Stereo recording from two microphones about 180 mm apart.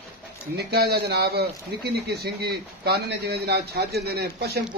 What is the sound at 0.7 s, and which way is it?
Speech, 65° right (ahead or behind).